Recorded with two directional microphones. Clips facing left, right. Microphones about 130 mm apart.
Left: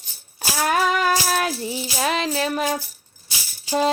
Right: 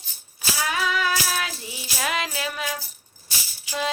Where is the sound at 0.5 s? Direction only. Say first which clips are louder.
Left 6 dB; 50° left (ahead or behind).